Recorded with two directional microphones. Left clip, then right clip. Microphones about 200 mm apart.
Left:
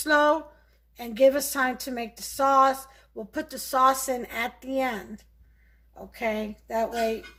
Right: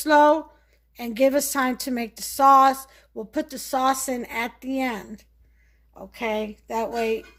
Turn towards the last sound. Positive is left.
turn(degrees=-40)  # may be behind; listen again after turning